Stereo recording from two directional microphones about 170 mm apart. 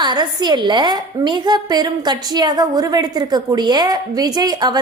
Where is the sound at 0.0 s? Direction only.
25° right (ahead or behind).